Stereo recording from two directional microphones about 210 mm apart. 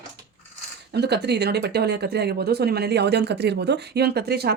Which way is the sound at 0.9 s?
50° right (ahead or behind).